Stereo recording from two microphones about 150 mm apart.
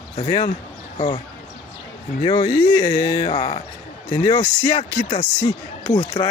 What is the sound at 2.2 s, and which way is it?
Speech, 30° left (ahead or behind).